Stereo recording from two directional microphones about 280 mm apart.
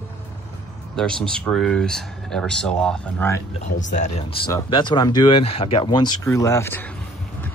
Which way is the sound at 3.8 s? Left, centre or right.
Left.